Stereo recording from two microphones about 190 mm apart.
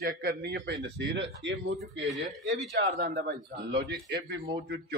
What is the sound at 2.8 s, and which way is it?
Speech, 55° right (ahead or behind).